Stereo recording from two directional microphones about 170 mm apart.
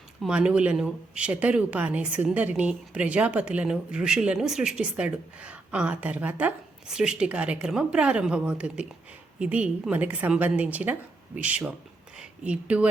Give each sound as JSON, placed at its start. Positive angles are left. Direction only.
{"t": 0.2, "sound": "a woman's voice", "side_deg": -5}